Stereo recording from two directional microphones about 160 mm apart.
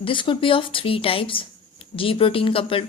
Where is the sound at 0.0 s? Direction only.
30° left (ahead or behind).